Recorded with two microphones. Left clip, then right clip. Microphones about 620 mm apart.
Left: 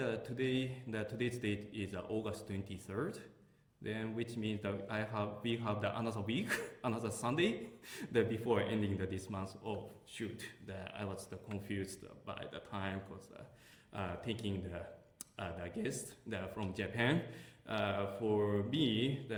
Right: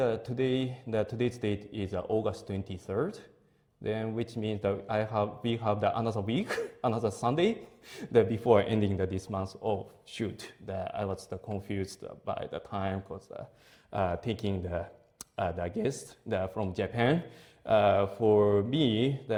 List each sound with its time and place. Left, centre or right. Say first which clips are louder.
0.0 s a man's voice: right 9 dB; right